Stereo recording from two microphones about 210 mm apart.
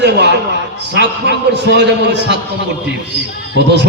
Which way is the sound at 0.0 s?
55° right (ahead or behind).